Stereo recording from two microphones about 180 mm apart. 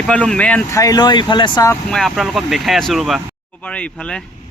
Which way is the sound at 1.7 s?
5° left (ahead or behind).